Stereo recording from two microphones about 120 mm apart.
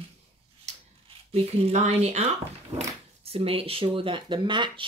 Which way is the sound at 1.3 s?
65° right (ahead or behind).